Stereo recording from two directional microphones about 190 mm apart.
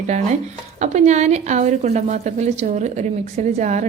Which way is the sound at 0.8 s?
35° right (ahead or behind).